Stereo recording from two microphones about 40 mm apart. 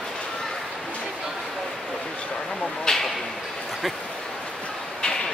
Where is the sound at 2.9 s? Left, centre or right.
Centre.